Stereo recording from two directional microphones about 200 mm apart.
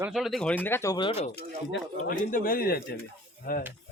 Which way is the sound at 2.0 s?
45° left (ahead or behind).